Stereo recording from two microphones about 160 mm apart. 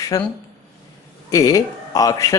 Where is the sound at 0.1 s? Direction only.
20° left (ahead or behind).